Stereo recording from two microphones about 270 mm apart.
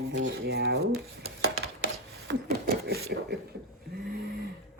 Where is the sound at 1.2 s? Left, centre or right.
Right.